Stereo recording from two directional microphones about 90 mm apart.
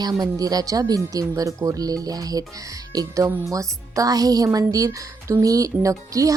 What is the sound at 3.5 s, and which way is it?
Speech, 40° right (ahead or behind).